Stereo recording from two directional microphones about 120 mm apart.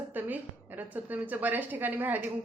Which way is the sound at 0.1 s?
15° right (ahead or behind).